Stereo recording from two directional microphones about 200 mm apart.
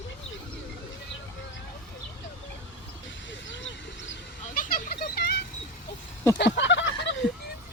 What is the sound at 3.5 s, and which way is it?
Vehicle, 70° left (ahead or behind).